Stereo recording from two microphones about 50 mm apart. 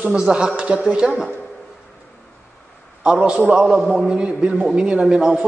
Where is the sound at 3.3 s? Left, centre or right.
Centre.